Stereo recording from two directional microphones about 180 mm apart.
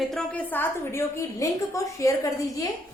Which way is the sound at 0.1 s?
10° left (ahead or behind).